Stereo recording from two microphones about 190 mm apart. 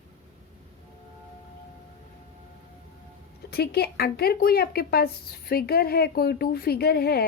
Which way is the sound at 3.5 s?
55° left (ahead or behind).